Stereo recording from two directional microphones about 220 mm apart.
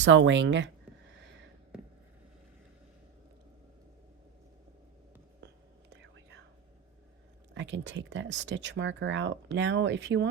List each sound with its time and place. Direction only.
0.0 s speech: 55° right (ahead or behind)
5.9 s whispering: 50° right (ahead or behind)
7.5 s speech: 55° right (ahead or behind)